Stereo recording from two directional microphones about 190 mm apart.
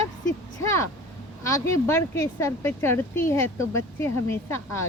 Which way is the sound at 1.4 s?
15° left (ahead or behind).